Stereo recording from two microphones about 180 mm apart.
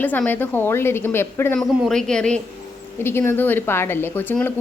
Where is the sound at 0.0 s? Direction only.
10° left (ahead or behind).